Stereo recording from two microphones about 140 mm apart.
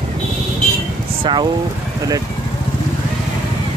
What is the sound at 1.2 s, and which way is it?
Speech, 30° right (ahead or behind).